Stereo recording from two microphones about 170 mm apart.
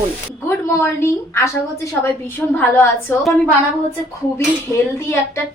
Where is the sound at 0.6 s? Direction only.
15° left (ahead or behind).